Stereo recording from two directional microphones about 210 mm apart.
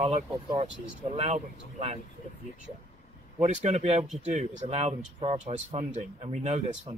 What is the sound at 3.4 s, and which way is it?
Speech, 30° right (ahead or behind).